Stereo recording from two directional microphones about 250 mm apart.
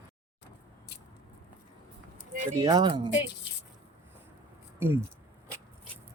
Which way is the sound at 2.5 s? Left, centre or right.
Centre.